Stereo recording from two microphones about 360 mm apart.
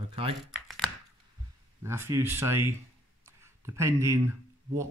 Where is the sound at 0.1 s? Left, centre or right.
Centre.